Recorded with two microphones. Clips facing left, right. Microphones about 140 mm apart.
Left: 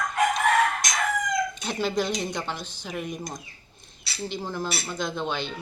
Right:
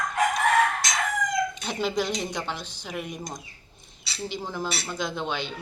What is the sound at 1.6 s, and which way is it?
Speech, 15° right (ahead or behind).